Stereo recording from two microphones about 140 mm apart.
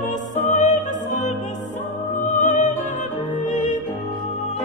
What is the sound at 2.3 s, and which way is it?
Music, 65° left (ahead or behind).